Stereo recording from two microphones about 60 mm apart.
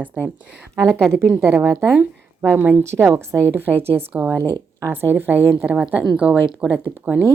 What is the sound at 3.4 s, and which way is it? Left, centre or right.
Speech, left.